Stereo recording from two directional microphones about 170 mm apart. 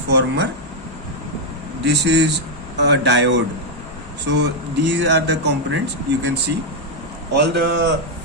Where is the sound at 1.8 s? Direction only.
90° right.